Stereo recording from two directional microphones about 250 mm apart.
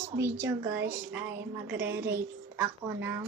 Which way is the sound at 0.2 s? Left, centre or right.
Centre.